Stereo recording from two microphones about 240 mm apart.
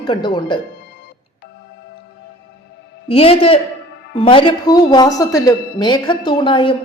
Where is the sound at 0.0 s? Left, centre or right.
Centre.